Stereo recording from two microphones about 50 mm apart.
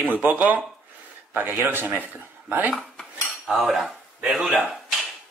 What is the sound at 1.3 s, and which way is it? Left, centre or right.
Speech, right.